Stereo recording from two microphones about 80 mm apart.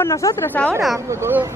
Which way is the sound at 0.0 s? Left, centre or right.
Left.